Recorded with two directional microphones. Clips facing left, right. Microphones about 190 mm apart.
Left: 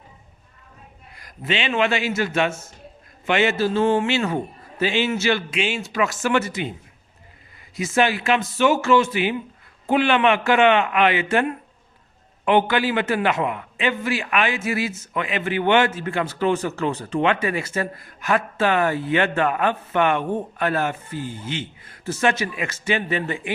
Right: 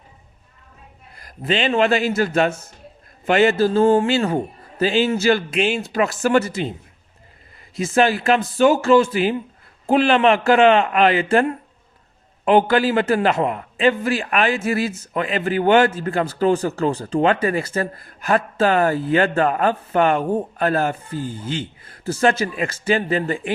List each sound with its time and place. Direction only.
1.5 s a man's voice: 35° right (ahead or behind)
7.8 s a man's voice: 30° right (ahead or behind)